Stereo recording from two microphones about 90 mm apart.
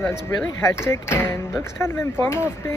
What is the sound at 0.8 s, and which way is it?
Speech, 30° left (ahead or behind).